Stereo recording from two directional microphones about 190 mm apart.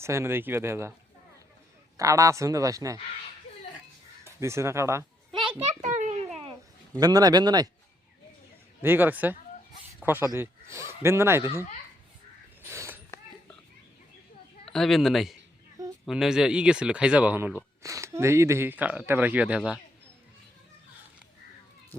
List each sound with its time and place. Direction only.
0.0 s speech: 15° right (ahead or behind)
2.0 s speech: 15° right (ahead or behind)
4.2 s a sound: 15° right (ahead or behind)
5.4 s children playing: 30° right (ahead or behind)
7.0 s speech: 20° right (ahead or behind)
8.8 s speech: 10° right (ahead or behind)
12.7 s a sound: 15° right (ahead or behind)
14.7 s speech: centre (ahead or behind)